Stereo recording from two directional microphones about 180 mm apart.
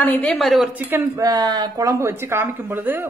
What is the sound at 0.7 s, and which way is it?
Speech, 10° right (ahead or behind).